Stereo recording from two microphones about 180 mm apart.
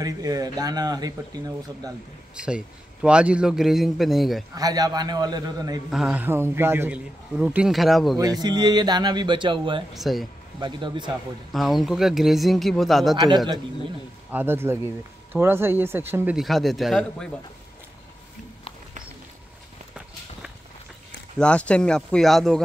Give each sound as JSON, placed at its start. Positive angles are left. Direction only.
{"t": 0.0, "sound": "speech", "side_deg": -20}
{"t": 2.3, "sound": "a man's voice", "side_deg": -5}
{"t": 4.6, "sound": "speech", "side_deg": -20}
{"t": 5.9, "sound": "a man's voice", "side_deg": -5}
{"t": 8.4, "sound": "speech", "side_deg": -25}
{"t": 9.9, "sound": "a man's voice", "side_deg": 0}
{"t": 10.6, "sound": "speech", "side_deg": -25}
{"t": 11.5, "sound": "a man's voice", "side_deg": 0}
{"t": 13.1, "sound": "speech", "side_deg": -20}
{"t": 14.3, "sound": "speech", "side_deg": -10}
{"t": 16.3, "sound": "a man's voice", "side_deg": 0}
{"t": 21.4, "sound": "a man's voice", "side_deg": 5}